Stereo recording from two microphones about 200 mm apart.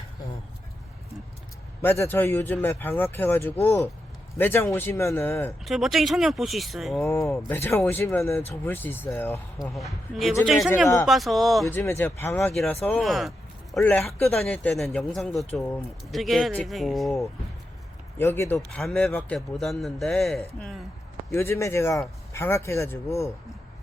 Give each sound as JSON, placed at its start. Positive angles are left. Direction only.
{"t": 1.8, "sound": "speech", "side_deg": 10}
{"t": 5.6, "sound": "a man's voice", "side_deg": 0}
{"t": 7.0, "sound": "speech", "side_deg": 15}
{"t": 9.6, "sound": "a man's voice", "side_deg": 0}
{"t": 18.2, "sound": "a man's voice", "side_deg": 10}
{"t": 21.2, "sound": "speech", "side_deg": 15}